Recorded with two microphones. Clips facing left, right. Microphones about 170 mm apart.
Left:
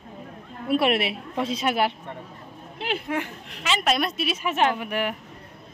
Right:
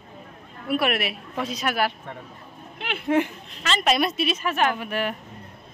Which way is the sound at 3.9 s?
5° right (ahead or behind).